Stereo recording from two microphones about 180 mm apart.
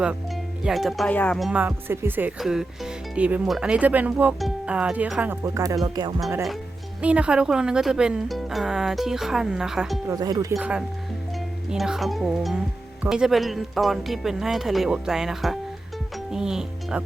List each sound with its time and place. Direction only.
0.6 s speech: centre (ahead or behind); by 6.1 s 25° right (ahead or behind)
7.0 s speech: 5° right (ahead or behind)
10.1 s speech: 20° right (ahead or behind)
10.5 s speech: 5° right (ahead or behind)